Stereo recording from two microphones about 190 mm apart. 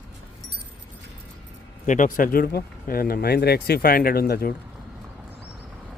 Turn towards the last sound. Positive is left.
turn(degrees=55)  # may be behind; listen again after turning